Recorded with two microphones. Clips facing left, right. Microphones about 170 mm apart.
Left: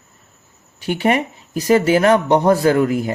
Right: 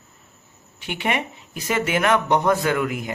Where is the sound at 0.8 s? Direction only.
40° left (ahead or behind).